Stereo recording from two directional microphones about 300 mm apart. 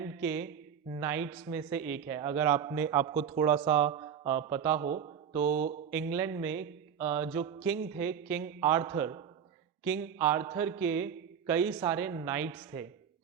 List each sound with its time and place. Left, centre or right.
0.0 s a sound: centre
0.9 s speech: centre
3.2 s speech: centre
3.4 s speech: centre; by 5.7 s right
5.9 s speech: centre